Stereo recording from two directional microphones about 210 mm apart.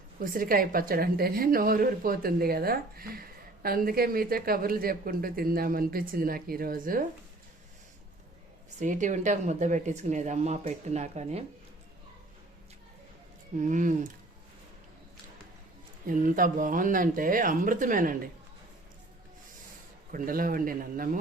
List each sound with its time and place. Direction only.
0.2 s a woman's voice: 40° right (ahead or behind)
8.8 s speech: 35° right (ahead or behind)
13.6 s speech: 35° right (ahead or behind)
16.0 s speech: 40° right (ahead or behind)
20.1 s speech: 40° right (ahead or behind)